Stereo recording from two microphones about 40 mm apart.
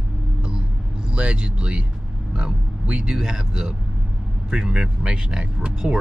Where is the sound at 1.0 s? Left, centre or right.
Right.